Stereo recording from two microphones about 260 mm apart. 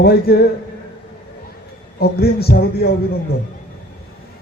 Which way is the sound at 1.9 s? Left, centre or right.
Left.